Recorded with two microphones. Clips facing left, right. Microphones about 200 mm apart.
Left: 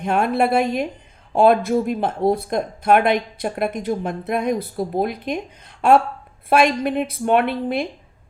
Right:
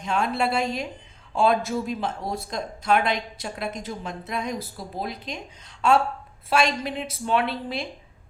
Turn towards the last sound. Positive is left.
turn(degrees=55)  # may be behind; listen again after turning